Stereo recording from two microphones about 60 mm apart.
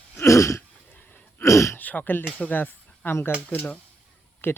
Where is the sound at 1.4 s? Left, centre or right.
Left.